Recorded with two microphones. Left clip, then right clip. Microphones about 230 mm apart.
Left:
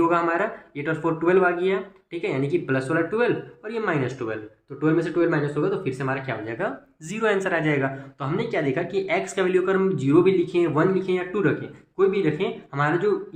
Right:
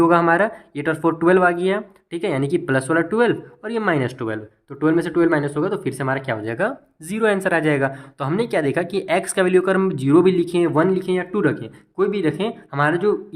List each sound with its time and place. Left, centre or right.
0.0 s speech: right